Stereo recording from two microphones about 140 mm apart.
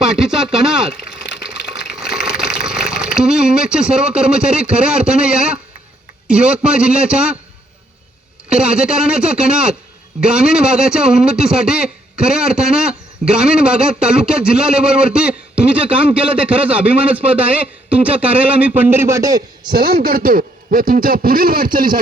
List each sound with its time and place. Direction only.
0.1 s speech: 5° right (ahead or behind)
1.2 s water: 5° right (ahead or behind)
6.2 s a man's voice: 10° right (ahead or behind)
8.4 s a man's voice: 5° right (ahead or behind); by 19.7 s 25° right (ahead or behind)
19.7 s a man's voice: 90° right